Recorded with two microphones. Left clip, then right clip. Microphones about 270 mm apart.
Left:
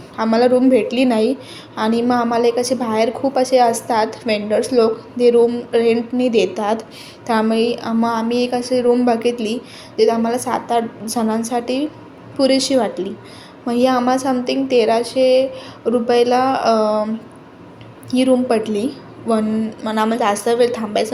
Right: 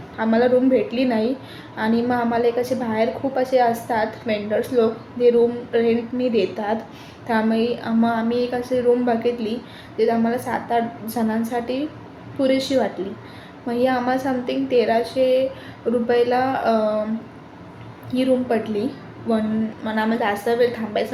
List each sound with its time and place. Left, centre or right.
0.2 s a woman's voice: left
18.1 s a woman's voice: left